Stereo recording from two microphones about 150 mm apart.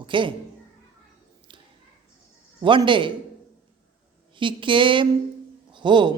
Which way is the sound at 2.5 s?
35° right (ahead or behind).